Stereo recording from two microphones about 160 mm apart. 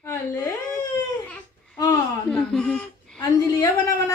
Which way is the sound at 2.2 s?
5° left (ahead or behind).